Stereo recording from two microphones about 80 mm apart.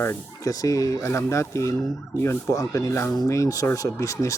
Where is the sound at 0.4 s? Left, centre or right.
Left.